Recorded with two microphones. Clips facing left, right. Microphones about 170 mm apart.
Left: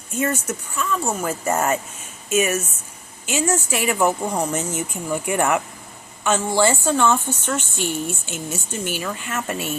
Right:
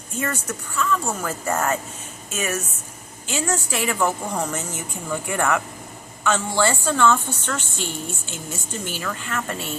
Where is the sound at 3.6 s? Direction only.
15° left (ahead or behind).